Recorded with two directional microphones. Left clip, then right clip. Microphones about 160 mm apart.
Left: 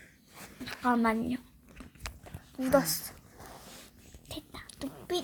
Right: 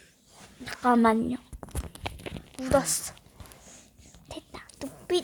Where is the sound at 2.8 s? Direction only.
30° right (ahead or behind).